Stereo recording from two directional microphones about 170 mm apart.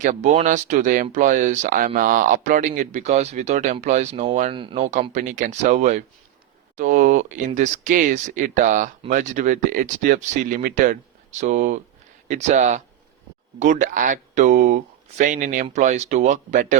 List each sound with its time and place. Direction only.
0.0 s speech: 45° right (ahead or behind)
4.5 s speech: 30° right (ahead or behind)
4.8 s speech: 45° right (ahead or behind)